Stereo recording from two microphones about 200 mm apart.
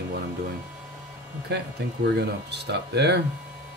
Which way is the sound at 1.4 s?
55° right (ahead or behind).